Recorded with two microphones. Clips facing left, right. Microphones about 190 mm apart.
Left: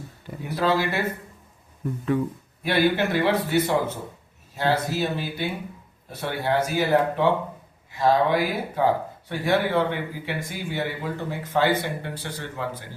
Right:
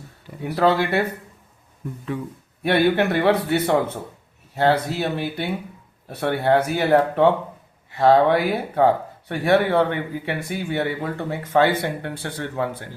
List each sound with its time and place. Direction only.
0.6 s speech: 60° right (ahead or behind)
2.6 s speech: 60° right (ahead or behind)